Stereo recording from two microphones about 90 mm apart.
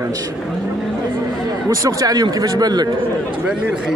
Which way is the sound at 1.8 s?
40° right (ahead or behind).